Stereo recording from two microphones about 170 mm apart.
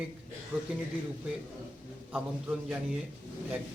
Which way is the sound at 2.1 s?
5° right (ahead or behind).